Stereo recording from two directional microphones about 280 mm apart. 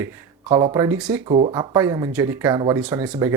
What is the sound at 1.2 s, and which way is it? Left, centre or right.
Speech, right.